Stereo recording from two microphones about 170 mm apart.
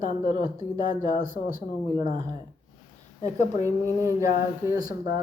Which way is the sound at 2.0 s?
25° right (ahead or behind).